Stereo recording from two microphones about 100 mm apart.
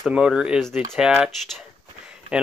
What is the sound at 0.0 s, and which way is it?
Speech, 5° right (ahead or behind).